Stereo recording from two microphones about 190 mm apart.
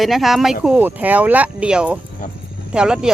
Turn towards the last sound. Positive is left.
turn(degrees=-5)  # may be behind; listen again after turning